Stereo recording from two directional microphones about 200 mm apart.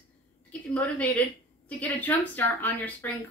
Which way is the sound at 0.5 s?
5° left (ahead or behind).